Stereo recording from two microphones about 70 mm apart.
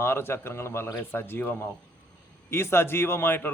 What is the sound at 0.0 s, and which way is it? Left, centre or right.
A man's voice, left.